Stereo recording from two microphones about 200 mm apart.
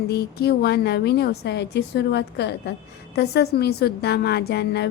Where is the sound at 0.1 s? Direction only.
55° left (ahead or behind).